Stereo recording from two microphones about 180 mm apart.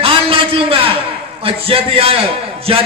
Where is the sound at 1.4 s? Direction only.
30° right (ahead or behind).